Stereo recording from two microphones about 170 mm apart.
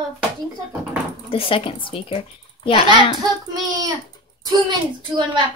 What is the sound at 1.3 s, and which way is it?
Speech, 30° left (ahead or behind).